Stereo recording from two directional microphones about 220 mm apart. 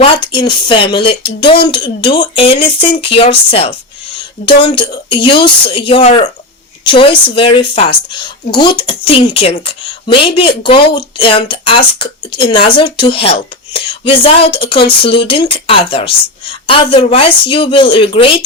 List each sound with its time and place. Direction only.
0.3 s speech: 20° left (ahead or behind)